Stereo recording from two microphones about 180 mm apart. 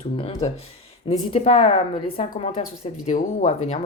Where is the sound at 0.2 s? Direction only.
30° left (ahead or behind).